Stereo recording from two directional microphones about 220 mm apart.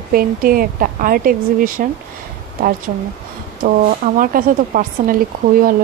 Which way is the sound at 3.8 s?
35° right (ahead or behind).